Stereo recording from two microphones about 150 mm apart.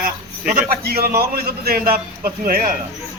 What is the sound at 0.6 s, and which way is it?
A man's voice, 90° right.